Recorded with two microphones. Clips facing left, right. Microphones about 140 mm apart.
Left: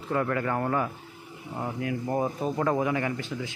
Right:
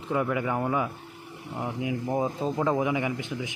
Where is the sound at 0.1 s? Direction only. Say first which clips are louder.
Even; 10° right (ahead or behind).